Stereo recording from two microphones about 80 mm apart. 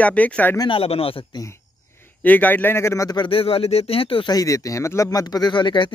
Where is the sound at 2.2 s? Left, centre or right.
Left.